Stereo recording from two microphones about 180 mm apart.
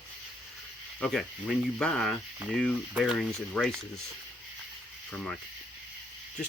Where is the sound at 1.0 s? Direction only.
Centre (ahead or behind).